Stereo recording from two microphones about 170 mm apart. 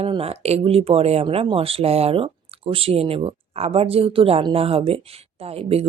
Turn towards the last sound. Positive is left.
turn(degrees=-35)  # may be behind; listen again after turning